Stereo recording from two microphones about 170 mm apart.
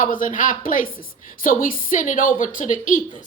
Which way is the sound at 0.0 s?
50° left (ahead or behind).